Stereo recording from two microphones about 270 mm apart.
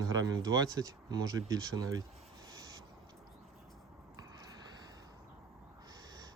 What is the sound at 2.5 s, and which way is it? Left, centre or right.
Owl, centre.